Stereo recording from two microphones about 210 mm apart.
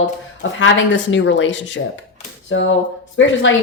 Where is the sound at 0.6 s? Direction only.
60° left (ahead or behind).